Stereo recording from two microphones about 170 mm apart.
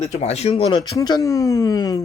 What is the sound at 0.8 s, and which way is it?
Speech, 20° left (ahead or behind).